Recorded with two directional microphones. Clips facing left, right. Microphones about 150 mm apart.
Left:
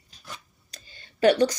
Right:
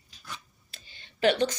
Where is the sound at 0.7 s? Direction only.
45° left (ahead or behind).